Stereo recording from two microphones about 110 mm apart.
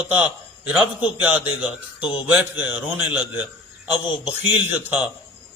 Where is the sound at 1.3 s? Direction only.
10° right (ahead or behind).